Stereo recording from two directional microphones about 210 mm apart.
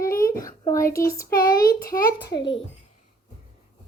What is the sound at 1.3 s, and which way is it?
Speech, 45° left (ahead or behind).